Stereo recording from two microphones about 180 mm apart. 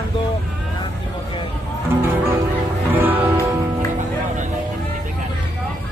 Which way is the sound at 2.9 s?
10° right (ahead or behind).